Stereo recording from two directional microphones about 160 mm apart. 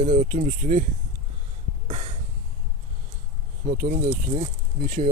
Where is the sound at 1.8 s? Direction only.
45° right (ahead or behind).